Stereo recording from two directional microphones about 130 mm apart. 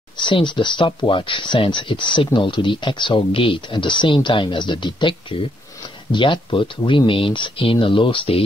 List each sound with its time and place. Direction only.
0.2 s speech: 35° left (ahead or behind)
6.1 s speech: 40° left (ahead or behind)